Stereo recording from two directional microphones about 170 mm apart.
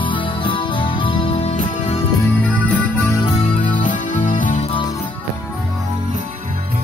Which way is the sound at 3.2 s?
35° left (ahead or behind).